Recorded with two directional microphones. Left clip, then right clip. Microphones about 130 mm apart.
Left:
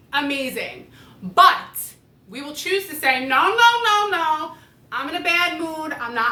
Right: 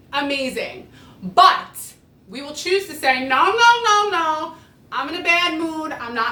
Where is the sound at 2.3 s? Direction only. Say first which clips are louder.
Right 2 dB; 25° right (ahead or behind).